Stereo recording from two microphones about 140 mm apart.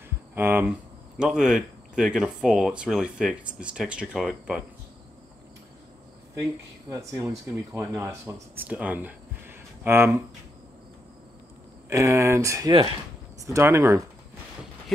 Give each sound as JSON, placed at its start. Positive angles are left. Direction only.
{"t": 0.3, "sound": "speech", "side_deg": -15}
{"t": 6.9, "sound": "speech", "side_deg": -20}
{"t": 11.9, "sound": "speech", "side_deg": -20}